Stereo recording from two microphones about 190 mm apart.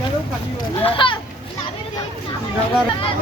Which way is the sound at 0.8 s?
30° left (ahead or behind).